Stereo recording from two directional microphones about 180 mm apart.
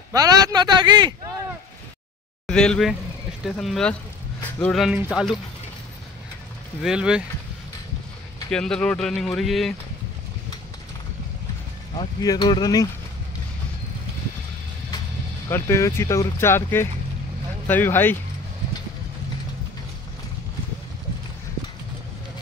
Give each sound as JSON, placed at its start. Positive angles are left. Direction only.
{"t": 0.1, "sound": "speech", "side_deg": -20}
{"t": 2.4, "sound": "speech", "side_deg": 5}
{"t": 6.8, "sound": "speech", "side_deg": -5}
{"t": 8.5, "sound": "speech", "side_deg": 5}
{"t": 12.0, "sound": "speech", "side_deg": 20}
{"t": 15.5, "sound": "speech", "side_deg": 15}